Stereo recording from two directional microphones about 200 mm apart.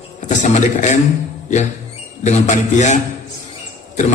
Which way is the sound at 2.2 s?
35° left (ahead or behind).